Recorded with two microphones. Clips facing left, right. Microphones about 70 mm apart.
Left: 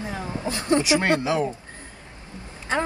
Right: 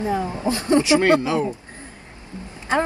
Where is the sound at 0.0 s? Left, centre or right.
Right.